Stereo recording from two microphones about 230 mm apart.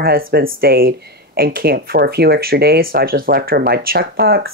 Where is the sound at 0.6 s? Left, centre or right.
Right.